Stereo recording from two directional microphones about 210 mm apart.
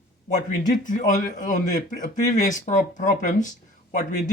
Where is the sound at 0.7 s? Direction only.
35° left (ahead or behind).